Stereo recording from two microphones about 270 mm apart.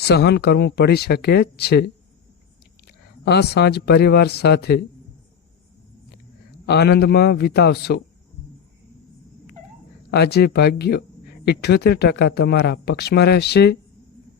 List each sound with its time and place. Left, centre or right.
0.0 s speech: left
2.8 s speech: left
6.7 s speech: left
10.1 s speech: left